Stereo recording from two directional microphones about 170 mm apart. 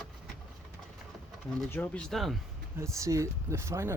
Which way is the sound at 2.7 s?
15° right (ahead or behind).